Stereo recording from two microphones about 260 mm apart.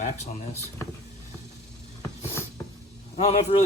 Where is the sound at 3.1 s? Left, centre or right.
Left.